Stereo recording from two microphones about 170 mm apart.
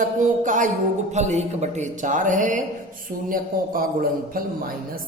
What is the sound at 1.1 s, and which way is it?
Speech, 40° right (ahead or behind).